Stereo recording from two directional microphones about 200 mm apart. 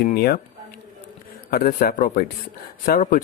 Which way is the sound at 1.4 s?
50° left (ahead or behind).